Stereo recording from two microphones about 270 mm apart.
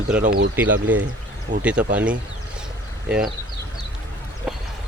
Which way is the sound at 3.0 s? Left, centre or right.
Centre.